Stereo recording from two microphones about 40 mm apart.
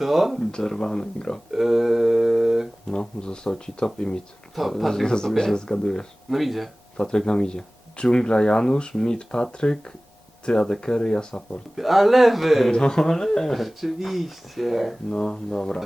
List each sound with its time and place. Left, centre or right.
0.0 s speech: centre
0.5 s speech: centre
1.5 s a sound: centre
2.9 s speech: centre
4.7 s speech: centre
5.0 s speech: centre
6.3 s speech: centre
6.9 s speech: left
11.8 s speech: centre
12.7 s speech: centre
13.6 s speech: centre
15.1 s speech: centre